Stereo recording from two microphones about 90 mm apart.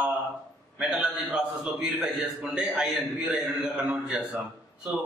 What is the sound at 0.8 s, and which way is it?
A man's voice, 10° right (ahead or behind).